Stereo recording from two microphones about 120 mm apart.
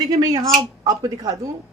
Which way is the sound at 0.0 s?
30° right (ahead or behind).